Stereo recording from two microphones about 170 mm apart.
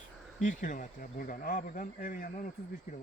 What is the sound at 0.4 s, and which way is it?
Speech, 50° left (ahead or behind).